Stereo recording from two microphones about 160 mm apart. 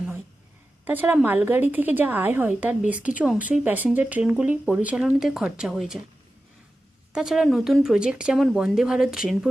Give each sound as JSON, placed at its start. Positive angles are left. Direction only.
{"t": 0.9, "sound": "a woman's voice", "side_deg": -10}
{"t": 7.1, "sound": "speech", "side_deg": -5}